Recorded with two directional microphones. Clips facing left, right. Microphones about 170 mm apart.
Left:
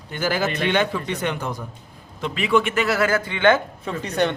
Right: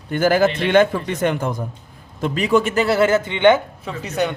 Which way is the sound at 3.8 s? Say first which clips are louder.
Even; 5° right (ahead or behind).